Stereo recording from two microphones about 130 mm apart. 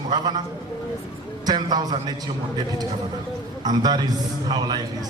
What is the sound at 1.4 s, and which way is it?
Speech, 30° right (ahead or behind).